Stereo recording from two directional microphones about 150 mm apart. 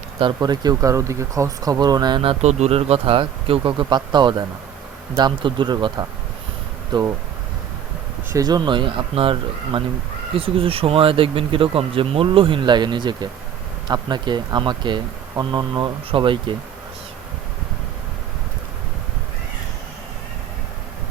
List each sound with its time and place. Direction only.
0.3 s speech: 25° right (ahead or behind)
2.4 s speech: 50° right (ahead or behind); by 7.1 s 30° right (ahead or behind)
8.3 s speech: 25° right (ahead or behind)